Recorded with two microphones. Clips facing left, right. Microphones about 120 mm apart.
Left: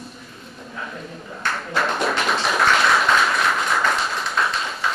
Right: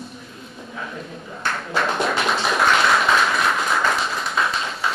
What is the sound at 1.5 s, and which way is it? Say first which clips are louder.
Music: even; centre (ahead or behind).